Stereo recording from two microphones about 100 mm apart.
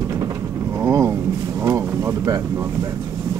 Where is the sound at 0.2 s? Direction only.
30° right (ahead or behind).